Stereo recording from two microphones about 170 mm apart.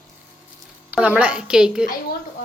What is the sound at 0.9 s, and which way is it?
A woman's voice, 5° right (ahead or behind).